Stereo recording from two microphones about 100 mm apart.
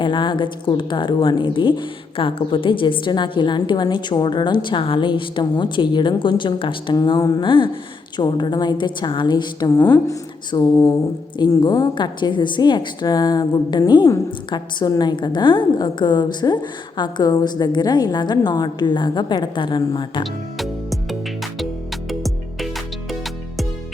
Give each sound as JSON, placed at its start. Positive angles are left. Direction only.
{"t": 0.0, "sound": "a woman's voice", "side_deg": 55}
{"t": 20.6, "sound": "music", "side_deg": 0}